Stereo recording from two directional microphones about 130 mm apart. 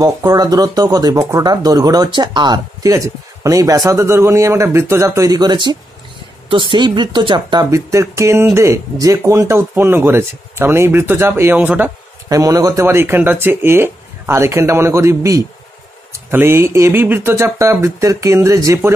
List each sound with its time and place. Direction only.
0.0 s speech: 30° right (ahead or behind)
7.9 s speech: 25° right (ahead or behind)
12.3 s speech: 25° right (ahead or behind)